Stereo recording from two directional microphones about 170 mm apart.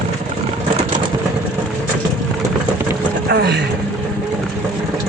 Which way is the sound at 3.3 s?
75° right (ahead or behind).